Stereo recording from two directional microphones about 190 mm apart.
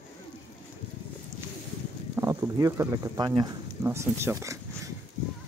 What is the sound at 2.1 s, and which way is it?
Speech, 15° right (ahead or behind).